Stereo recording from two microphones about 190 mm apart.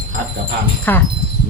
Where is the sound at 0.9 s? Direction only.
10° left (ahead or behind).